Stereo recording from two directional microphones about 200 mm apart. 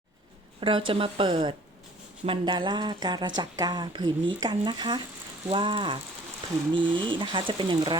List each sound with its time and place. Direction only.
0.6 s speech: 25° right (ahead or behind)